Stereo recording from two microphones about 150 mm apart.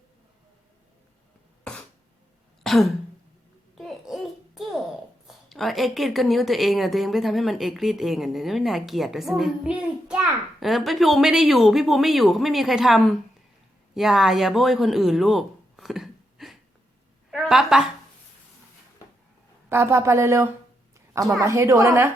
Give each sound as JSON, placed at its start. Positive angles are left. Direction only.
{"t": 2.6, "sound": "throat clearing", "side_deg": 0}
{"t": 3.8, "sound": "babbling", "side_deg": 0}
{"t": 5.3, "sound": "a woman's voice", "side_deg": 0}
{"t": 19.7, "sound": "a woman's voice", "side_deg": -15}